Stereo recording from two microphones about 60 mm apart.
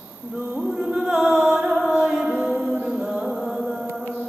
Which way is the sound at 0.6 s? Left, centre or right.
Centre.